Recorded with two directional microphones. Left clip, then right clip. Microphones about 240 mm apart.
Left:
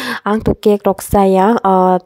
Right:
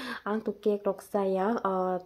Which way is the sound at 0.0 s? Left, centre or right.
Left.